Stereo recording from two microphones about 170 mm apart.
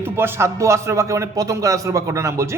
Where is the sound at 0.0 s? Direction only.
15° right (ahead or behind).